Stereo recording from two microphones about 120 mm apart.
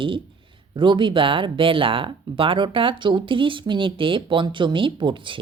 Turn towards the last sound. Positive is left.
turn(degrees=-45)  # may be behind; listen again after turning